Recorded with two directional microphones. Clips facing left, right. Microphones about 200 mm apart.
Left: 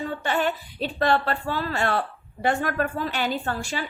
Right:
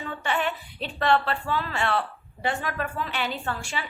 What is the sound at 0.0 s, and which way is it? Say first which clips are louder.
A woman's voice: left 3 dB; 40° left (ahead or behind).